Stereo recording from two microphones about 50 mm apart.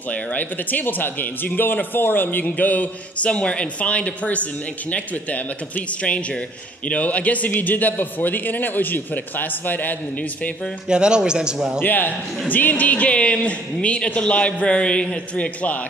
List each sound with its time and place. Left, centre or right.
0.1 s a man's voice: left
10.9 s a man's voice: centre
11.8 s a man's voice: left